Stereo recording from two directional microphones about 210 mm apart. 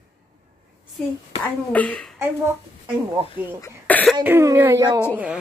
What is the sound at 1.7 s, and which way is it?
Speech, 5° left (ahead or behind).